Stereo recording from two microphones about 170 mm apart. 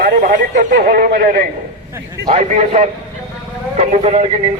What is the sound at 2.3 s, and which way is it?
A man's voice, 45° right (ahead or behind).